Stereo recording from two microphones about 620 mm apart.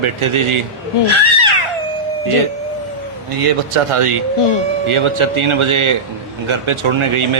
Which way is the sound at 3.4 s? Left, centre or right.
Right.